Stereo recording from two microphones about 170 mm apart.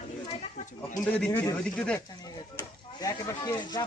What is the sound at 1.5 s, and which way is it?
Speech, 5° left (ahead or behind).